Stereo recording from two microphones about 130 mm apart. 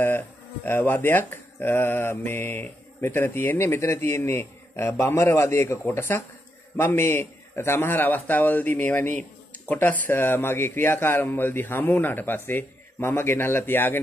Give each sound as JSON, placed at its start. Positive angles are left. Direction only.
{"t": 0.7, "sound": "speech", "side_deg": 15}